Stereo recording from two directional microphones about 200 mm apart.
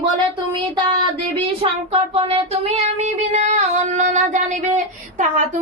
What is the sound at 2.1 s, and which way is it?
Child singing, 30° right (ahead or behind).